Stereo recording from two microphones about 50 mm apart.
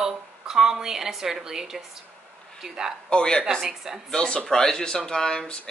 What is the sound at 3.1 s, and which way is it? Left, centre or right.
Speech, centre.